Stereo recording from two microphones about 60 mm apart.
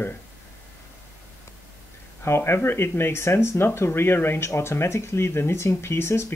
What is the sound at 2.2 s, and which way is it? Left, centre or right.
Speech, left.